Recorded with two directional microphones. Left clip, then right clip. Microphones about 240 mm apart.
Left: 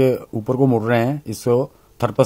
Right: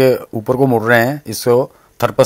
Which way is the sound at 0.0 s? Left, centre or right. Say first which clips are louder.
Right 5 dB; centre.